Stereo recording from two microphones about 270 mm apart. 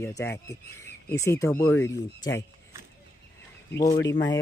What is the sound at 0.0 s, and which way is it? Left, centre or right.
Speech, centre.